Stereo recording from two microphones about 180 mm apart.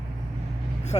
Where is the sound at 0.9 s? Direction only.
30° left (ahead or behind).